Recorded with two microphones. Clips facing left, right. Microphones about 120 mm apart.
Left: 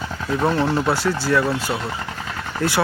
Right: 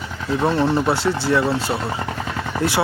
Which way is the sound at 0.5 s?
25° right (ahead or behind).